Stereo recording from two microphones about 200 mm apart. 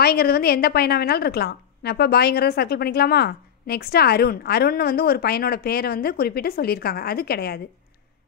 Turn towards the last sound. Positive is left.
turn(degrees=50)  # may be behind; listen again after turning